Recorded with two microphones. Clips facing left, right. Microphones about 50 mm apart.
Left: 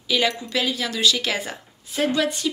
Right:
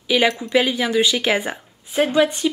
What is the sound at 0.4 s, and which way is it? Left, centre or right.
Speech, right.